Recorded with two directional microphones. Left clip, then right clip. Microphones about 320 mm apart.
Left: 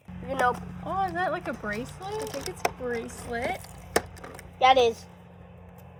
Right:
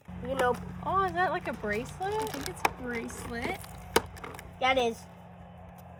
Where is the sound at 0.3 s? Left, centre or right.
Left.